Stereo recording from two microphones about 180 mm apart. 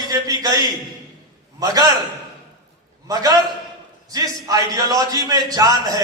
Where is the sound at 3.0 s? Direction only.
20° right (ahead or behind).